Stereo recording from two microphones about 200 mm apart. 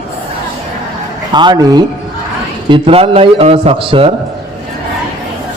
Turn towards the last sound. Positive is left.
turn(degrees=-25)  # may be behind; listen again after turning